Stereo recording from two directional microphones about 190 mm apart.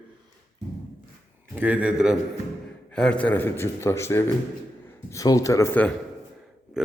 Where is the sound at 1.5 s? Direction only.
5° right (ahead or behind); by 5.9 s 10° left (ahead or behind).